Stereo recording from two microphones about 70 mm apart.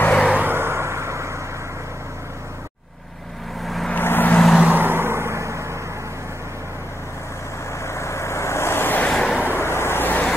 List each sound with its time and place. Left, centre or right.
0.0 s vehicle: centre
0.4 s vehicle: right
3.6 s vehicle: centre
3.9 s vehicle: left
4.6 s vehicle: right
7.8 s vehicle: left
9.0 s vehicle: centre
9.5 s vehicle: left